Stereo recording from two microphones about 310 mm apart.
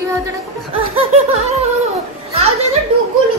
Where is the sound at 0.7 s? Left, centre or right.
Centre.